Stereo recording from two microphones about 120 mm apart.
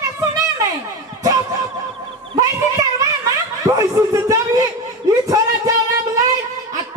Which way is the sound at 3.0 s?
30° right (ahead or behind).